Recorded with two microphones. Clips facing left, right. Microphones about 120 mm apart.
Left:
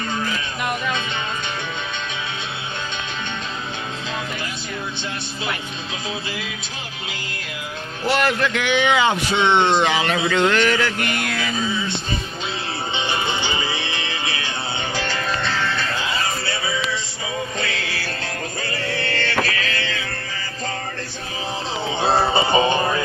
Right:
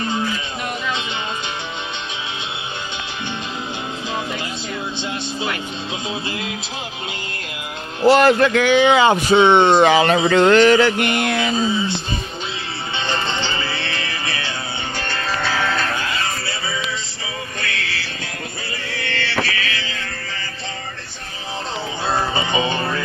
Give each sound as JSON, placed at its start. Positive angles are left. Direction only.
{"t": 8.0, "sound": "speech", "side_deg": -35}
{"t": 10.2, "sound": "a sound", "side_deg": -35}
{"t": 12.9, "sound": "music", "side_deg": 15}
{"t": 18.9, "sound": "music", "side_deg": 40}
{"t": 22.0, "sound": "music", "side_deg": 30}
{"t": 22.7, "sound": "music", "side_deg": 15}